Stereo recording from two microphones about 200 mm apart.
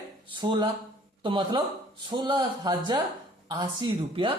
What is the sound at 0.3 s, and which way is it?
Speech, 25° right (ahead or behind).